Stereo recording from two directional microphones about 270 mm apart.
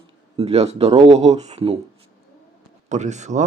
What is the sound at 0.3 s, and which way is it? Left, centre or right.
A man's voice, right.